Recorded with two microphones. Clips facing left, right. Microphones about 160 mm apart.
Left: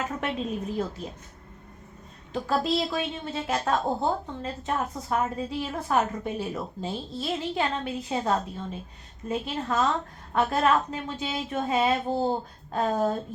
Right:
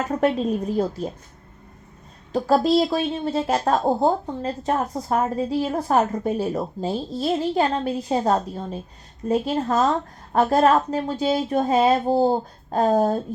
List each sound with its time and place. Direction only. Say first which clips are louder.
0.0 s a woman's voice: right 9 dB; 35° right (ahead or behind)
2.3 s a woman's voice: right 8 dB; 35° right (ahead or behind)